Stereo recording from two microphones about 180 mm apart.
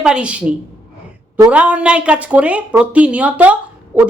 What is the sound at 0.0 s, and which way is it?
A woman's voice, 5° right (ahead or behind).